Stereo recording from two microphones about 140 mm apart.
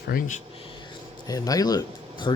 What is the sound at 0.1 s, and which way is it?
Speech, 65° left (ahead or behind).